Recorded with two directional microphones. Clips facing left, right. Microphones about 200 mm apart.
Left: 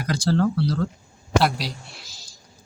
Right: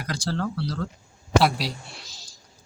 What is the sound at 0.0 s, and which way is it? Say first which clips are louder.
Speech: left 7 dB; 10° left (ahead or behind).